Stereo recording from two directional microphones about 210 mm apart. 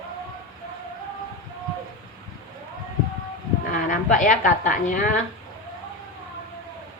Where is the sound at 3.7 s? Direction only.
40° left (ahead or behind).